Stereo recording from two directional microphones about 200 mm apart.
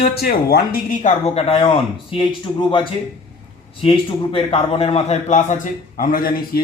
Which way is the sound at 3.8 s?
25° left (ahead or behind).